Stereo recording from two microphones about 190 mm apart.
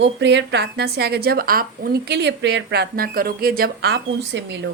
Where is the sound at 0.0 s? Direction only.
65° right (ahead or behind).